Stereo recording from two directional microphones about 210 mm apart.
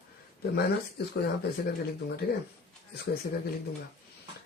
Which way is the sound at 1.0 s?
50° left (ahead or behind).